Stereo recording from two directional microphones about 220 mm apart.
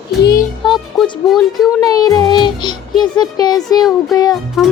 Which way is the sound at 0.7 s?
Centre (ahead or behind).